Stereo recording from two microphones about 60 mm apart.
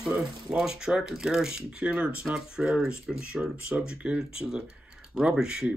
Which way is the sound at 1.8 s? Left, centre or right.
Right.